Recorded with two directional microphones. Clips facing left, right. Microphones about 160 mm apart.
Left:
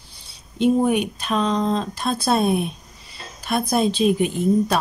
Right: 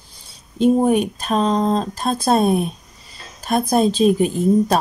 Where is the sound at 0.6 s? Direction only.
40° right (ahead or behind).